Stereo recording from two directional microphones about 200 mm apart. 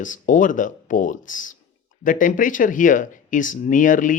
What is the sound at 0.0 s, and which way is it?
Speech, 40° left (ahead or behind).